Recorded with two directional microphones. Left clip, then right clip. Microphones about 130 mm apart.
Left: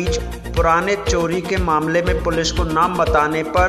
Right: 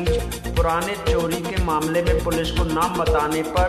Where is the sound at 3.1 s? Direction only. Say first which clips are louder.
Left 4 dB; 35° left (ahead or behind).